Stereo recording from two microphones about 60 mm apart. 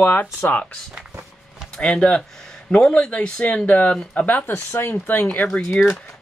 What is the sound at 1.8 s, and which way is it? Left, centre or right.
Speech, centre.